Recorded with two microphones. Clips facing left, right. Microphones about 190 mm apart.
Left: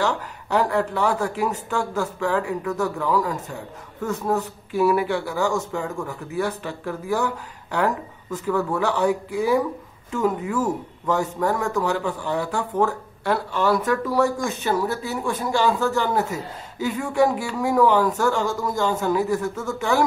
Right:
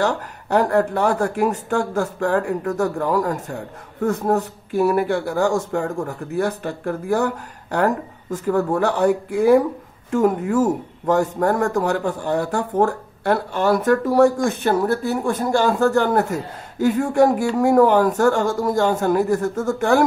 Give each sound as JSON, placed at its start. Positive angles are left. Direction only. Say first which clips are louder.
{"t": 0.0, "sound": "speech", "louder": "right 3 dB", "side_deg": -50}